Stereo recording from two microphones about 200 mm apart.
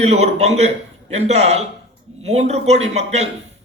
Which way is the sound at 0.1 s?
35° right (ahead or behind).